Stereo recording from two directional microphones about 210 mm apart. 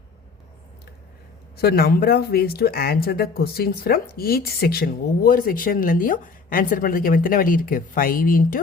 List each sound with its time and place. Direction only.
1.5 s speech: 45° left (ahead or behind)